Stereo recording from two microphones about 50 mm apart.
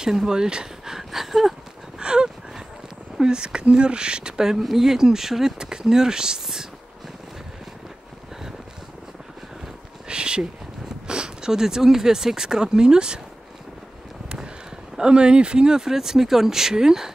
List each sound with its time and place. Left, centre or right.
0.0 s speech: centre
2.0 s a sound: centre
3.2 s speech: centre
10.0 s a sound: centre
11.1 s speech: centre
15.0 s speech: centre